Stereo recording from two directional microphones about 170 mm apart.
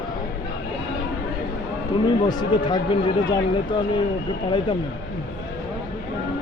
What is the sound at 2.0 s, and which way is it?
Speech, 25° left (ahead or behind).